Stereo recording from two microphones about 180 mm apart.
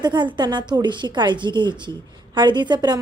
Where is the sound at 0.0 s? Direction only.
25° right (ahead or behind).